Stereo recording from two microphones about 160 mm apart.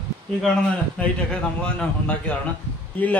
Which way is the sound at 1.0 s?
10° left (ahead or behind).